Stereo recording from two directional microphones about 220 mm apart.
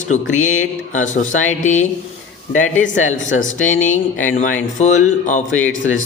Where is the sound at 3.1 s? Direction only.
65° left (ahead or behind).